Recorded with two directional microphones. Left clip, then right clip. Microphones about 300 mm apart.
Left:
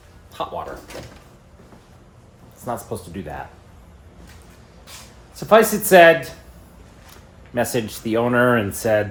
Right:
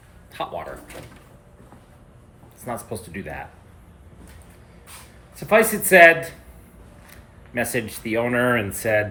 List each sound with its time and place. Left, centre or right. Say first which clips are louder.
0.3 s speech: left 2 dB; centre
2.9 s speech: left 3 dB; centre
5.4 s speech: left 3 dB; centre
7.5 s speech: left 3 dB; centre